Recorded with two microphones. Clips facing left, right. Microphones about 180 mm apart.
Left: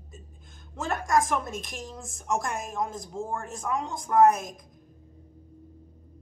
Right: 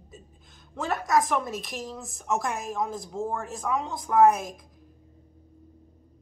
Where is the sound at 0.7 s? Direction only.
5° right (ahead or behind).